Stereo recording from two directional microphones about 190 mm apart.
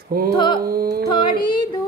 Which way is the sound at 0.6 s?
50° right (ahead or behind).